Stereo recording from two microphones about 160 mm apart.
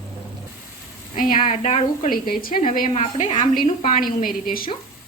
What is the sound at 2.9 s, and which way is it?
A woman's voice, 40° left (ahead or behind).